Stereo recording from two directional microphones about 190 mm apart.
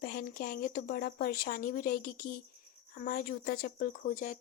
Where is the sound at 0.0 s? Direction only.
50° left (ahead or behind).